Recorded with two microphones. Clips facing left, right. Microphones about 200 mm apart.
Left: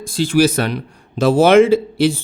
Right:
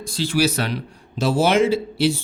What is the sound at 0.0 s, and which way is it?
Speech, 50° left (ahead or behind).